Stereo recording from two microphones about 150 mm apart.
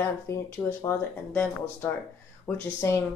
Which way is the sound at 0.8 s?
10° left (ahead or behind).